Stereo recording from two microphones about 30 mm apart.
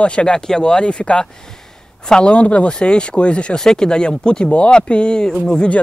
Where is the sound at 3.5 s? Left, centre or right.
Left.